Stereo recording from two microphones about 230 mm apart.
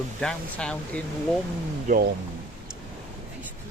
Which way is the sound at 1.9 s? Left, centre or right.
Right.